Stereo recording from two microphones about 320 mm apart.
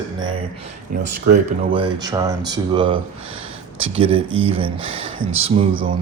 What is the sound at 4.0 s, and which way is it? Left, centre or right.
Speech, centre.